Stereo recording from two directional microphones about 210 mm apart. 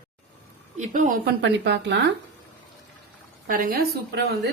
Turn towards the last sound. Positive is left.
turn(degrees=-45)  # may be behind; listen again after turning